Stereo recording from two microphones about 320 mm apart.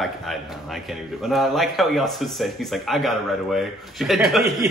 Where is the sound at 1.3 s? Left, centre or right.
Centre.